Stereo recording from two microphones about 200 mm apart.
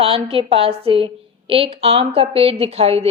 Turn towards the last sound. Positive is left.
turn(degrees=-30)  # may be behind; listen again after turning